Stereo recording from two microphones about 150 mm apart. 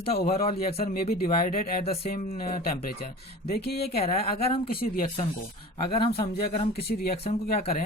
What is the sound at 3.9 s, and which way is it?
Speech, 40° left (ahead or behind).